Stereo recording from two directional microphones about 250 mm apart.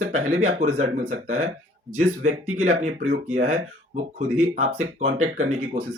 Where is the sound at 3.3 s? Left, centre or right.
Right.